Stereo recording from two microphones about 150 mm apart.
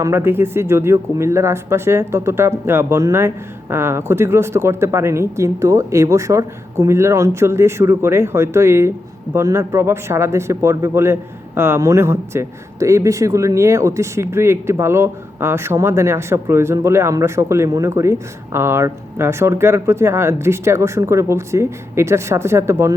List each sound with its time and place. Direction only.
0.0 s speech: 15° right (ahead or behind)